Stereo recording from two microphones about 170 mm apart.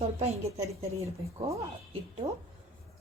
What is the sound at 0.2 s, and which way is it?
Speech, 40° right (ahead or behind).